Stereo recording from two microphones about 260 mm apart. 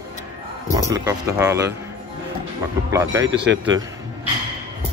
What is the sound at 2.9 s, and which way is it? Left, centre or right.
Speech, centre.